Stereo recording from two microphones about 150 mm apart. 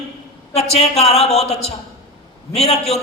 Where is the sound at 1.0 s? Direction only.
45° left (ahead or behind).